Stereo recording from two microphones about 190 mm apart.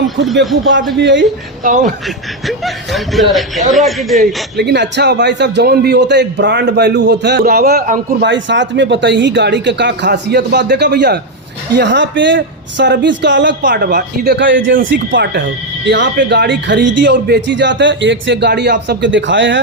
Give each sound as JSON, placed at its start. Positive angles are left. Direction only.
{"t": 0.3, "sound": "a man's voice", "side_deg": -75}
{"t": 0.9, "sound": "a man's voice", "side_deg": -65}
{"t": 1.6, "sound": "speech", "side_deg": -40}
{"t": 2.0, "sound": "speech", "side_deg": 0}
{"t": 4.5, "sound": "a man's voice", "side_deg": -60}
{"t": 8.2, "sound": "a man's voice", "side_deg": -70}
{"t": 15.1, "sound": "a man's voice", "side_deg": -60}